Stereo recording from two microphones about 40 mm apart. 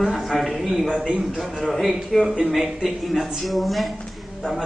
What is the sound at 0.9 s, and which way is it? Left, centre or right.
Speech, centre.